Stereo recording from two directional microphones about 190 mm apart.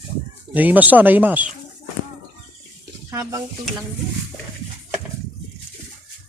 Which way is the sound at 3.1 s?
15° right (ahead or behind).